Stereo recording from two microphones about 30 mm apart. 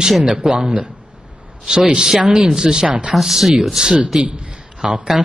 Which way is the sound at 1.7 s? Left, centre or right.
Right.